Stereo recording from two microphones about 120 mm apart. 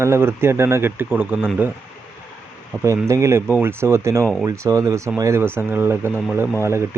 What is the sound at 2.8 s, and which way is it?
Speech, 25° right (ahead or behind).